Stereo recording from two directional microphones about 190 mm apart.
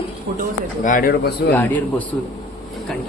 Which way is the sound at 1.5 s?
10° left (ahead or behind).